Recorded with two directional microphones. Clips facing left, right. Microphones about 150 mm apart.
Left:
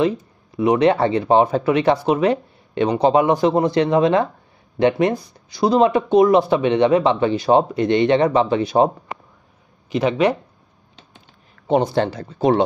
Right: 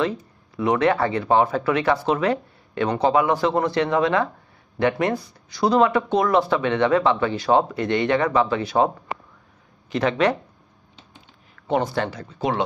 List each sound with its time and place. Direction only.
0.6 s speech: 20° left (ahead or behind)
9.9 s speech: 15° left (ahead or behind)
11.6 s speech: 20° left (ahead or behind)